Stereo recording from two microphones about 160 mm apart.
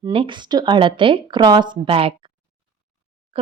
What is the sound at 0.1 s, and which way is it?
Speech, 30° right (ahead or behind).